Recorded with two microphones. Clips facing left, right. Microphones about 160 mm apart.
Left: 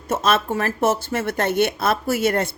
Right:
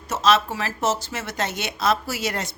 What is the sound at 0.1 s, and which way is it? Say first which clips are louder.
Speech: left 1 dB; 55° left (ahead or behind).